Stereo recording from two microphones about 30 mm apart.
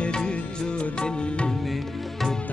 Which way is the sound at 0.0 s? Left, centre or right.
Left.